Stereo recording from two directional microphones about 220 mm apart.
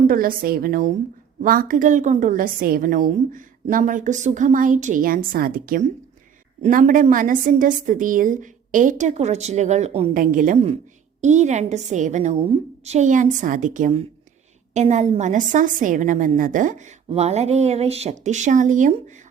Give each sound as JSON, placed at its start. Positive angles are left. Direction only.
{"t": 0.1, "sound": "a woman's voice", "side_deg": -40}